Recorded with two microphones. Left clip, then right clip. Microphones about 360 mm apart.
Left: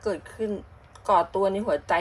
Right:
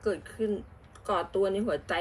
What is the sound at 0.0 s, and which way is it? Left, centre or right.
Speech, left.